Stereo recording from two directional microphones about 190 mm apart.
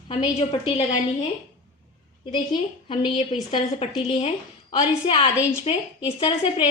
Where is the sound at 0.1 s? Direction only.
30° left (ahead or behind).